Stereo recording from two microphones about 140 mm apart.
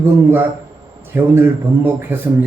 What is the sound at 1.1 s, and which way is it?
Speech, 15° right (ahead or behind).